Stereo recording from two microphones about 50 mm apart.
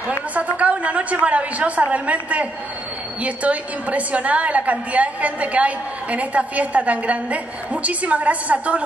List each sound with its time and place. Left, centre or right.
0.3 s a woman's voice: right